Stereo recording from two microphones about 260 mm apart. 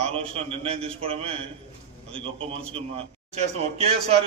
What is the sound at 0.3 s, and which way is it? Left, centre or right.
A man's voice, right.